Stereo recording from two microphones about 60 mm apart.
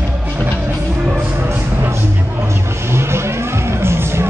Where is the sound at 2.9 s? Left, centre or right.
Right.